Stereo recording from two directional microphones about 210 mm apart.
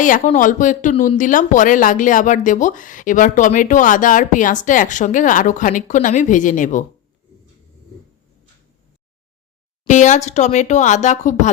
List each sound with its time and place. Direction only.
0.0 s speech: 40° left (ahead or behind)
9.8 s speech: 35° left (ahead or behind)